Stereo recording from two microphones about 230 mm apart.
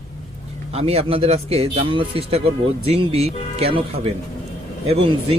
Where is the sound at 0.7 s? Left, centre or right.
Right.